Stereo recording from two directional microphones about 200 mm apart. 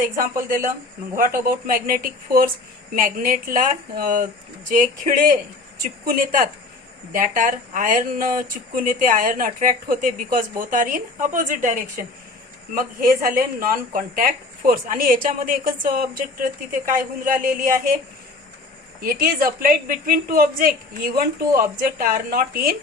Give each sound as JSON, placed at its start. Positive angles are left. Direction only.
{"t": 0.0, "sound": "speech", "side_deg": -45}
{"t": 18.9, "sound": "speech", "side_deg": -45}